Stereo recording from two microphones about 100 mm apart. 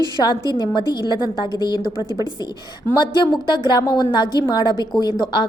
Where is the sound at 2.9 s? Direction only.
45° left (ahead or behind).